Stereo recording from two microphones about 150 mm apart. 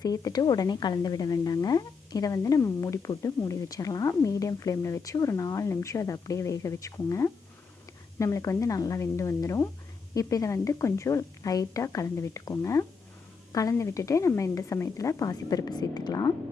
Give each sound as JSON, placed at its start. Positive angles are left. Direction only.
{"t": 0.0, "sound": "a woman's voice", "side_deg": 25}